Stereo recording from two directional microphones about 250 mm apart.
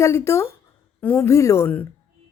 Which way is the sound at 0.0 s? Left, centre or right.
Centre.